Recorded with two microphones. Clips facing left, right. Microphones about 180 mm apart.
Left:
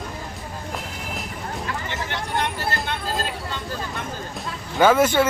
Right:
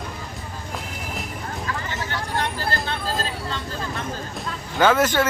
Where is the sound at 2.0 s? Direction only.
20° left (ahead or behind).